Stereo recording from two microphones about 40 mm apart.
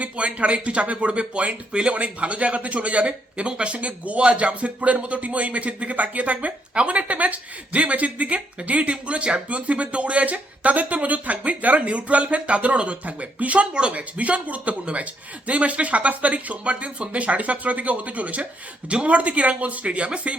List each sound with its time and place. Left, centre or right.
0.0 s speech: right